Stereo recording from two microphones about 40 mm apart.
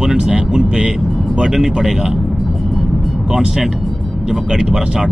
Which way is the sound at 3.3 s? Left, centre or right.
Centre.